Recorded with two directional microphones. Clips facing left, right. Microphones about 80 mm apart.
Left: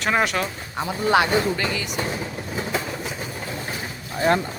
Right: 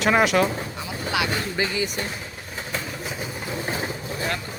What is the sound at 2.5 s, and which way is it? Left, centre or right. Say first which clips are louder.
Vehicle: left 4 dB; centre.